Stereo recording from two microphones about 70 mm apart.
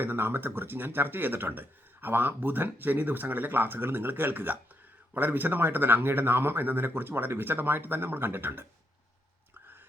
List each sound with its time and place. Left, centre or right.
0.0 s a man's voice: right